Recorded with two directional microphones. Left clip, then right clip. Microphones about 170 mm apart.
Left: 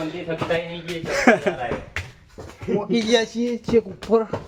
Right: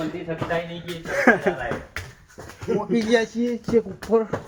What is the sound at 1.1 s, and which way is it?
Speech, 5° left (ahead or behind).